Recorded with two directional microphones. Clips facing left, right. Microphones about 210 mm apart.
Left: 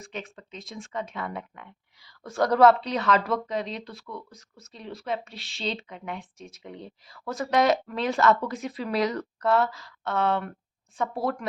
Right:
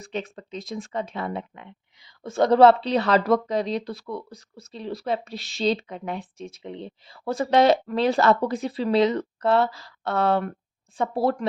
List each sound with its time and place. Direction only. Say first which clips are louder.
0.0 s speech: right 6 dB; 35° right (ahead or behind)